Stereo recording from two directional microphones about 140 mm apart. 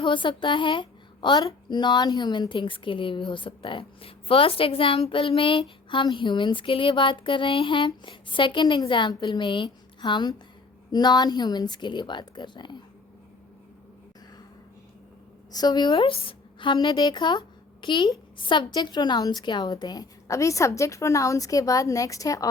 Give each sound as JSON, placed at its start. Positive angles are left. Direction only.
{"t": 0.0, "sound": "a woman's voice", "side_deg": 35}
{"t": 15.5, "sound": "a woman's voice", "side_deg": 30}